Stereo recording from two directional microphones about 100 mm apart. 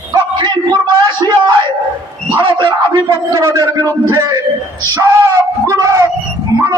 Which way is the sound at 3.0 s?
30° right (ahead or behind).